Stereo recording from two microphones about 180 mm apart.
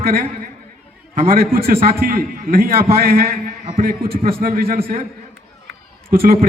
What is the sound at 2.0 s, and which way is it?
A man's voice, 55° right (ahead or behind).